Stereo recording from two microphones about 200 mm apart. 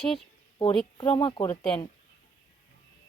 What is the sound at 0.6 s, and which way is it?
Speech, 25° left (ahead or behind).